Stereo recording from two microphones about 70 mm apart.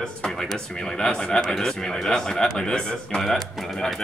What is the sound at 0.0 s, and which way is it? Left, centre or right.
A man's voice, centre.